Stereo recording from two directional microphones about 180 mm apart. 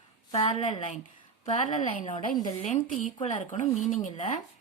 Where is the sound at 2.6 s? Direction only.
45° left (ahead or behind).